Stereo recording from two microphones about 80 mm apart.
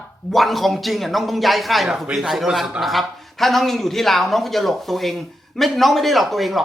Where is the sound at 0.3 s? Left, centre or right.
Centre.